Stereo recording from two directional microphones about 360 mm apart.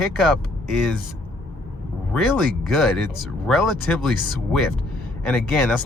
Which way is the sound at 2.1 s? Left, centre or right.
Centre.